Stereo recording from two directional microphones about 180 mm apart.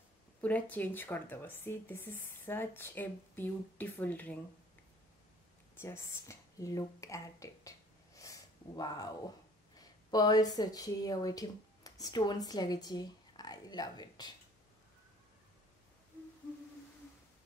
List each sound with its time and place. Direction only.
0.4 s speech: 10° left (ahead or behind)
5.8 s speech: 15° left (ahead or behind)
8.2 s a sound: 20° left (ahead or behind)
9.8 s speech: 20° left (ahead or behind)